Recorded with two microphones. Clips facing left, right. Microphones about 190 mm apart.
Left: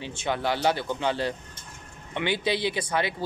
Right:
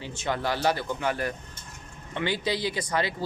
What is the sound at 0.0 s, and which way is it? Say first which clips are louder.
Speech: left 1 dB; 20° left (ahead or behind).